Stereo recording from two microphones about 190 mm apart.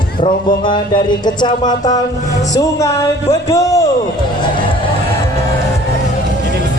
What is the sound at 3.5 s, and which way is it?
Speech, 15° left (ahead or behind).